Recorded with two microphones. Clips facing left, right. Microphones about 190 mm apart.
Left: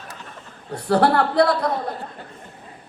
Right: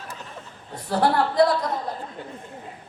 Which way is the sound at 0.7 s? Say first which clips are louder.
Left 4 dB; 70° left (ahead or behind).